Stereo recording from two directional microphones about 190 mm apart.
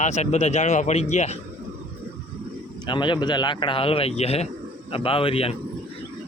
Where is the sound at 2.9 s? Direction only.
25° left (ahead or behind).